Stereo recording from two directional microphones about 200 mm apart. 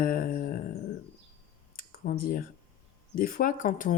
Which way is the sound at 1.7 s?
45° left (ahead or behind).